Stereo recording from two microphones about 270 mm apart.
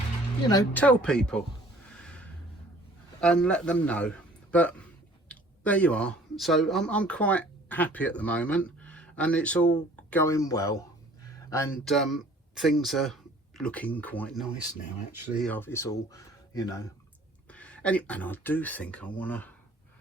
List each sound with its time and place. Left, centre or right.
0.7 s speech: centre
1.9 s a sound: centre
3.2 s a man's voice: centre